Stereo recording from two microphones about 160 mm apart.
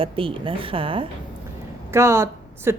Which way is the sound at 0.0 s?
35° right (ahead or behind).